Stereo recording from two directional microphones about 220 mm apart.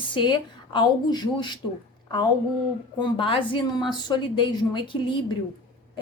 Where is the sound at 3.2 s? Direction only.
25° left (ahead or behind).